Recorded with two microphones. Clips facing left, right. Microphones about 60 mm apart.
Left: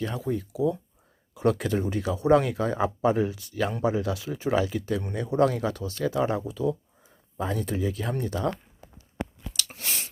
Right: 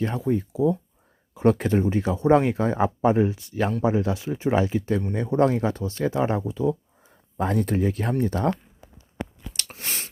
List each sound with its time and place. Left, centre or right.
0.0 s speech: right
7.3 s speech: right